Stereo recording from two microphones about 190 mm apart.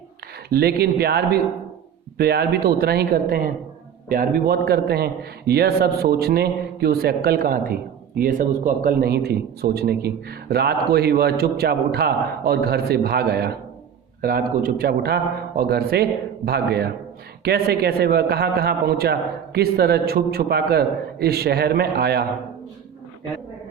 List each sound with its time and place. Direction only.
0.5 s a man's voice: 55° right (ahead or behind)